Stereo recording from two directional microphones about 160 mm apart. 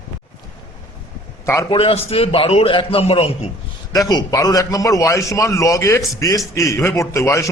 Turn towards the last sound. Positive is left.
turn(degrees=15)  # may be behind; listen again after turning